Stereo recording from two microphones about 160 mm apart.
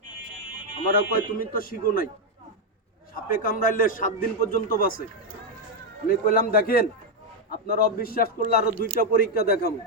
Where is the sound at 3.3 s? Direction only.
65° left (ahead or behind).